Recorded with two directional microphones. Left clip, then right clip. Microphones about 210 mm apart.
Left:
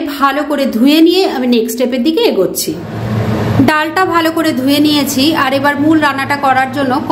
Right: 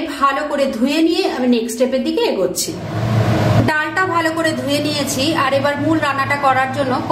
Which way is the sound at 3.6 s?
45° left (ahead or behind).